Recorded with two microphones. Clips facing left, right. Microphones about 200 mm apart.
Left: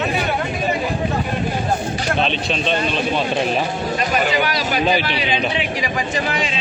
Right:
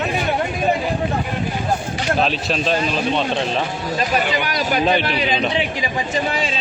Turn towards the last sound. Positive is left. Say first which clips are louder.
# even
turn(degrees=-30)  # may be behind; listen again after turning